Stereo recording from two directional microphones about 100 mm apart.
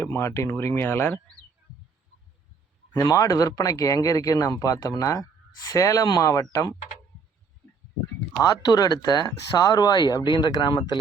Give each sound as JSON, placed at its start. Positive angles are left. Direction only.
{"t": 0.0, "sound": "speech", "side_deg": 25}
{"t": 2.9, "sound": "speech", "side_deg": 35}
{"t": 8.4, "sound": "speech", "side_deg": 40}